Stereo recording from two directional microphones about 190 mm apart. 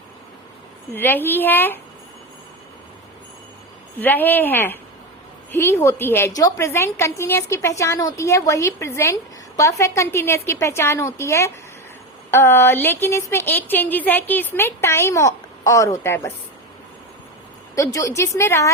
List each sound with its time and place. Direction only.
0.9 s a woman's voice: 10° left (ahead or behind)
3.9 s a woman's voice: 10° left (ahead or behind)
17.7 s a woman's voice: 15° left (ahead or behind)